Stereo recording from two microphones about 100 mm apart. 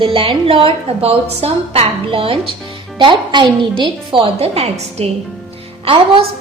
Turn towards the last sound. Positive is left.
turn(degrees=-70)  # may be behind; listen again after turning